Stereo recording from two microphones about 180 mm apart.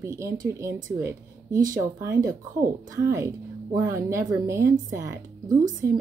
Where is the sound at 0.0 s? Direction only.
15° right (ahead or behind).